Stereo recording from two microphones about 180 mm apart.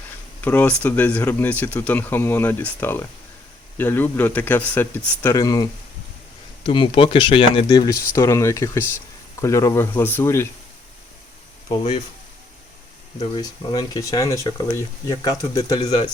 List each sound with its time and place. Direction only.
0.4 s speech: 10° left (ahead or behind)
6.7 s speech: 25° left (ahead or behind)
13.4 s speech: 20° left (ahead or behind)